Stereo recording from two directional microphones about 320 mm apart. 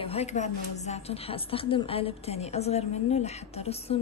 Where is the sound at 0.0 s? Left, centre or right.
Centre.